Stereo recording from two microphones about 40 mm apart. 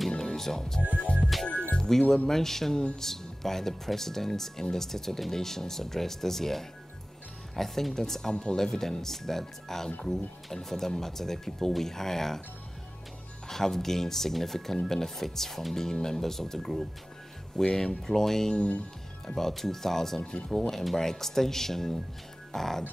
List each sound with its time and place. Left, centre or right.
0.2 s music: centre
1.8 s speech: centre
13.5 s speech: centre
18.5 s speech: left
19.2 s speech: centre